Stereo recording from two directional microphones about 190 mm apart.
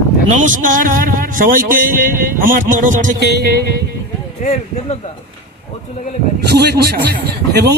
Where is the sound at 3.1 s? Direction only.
60° right (ahead or behind).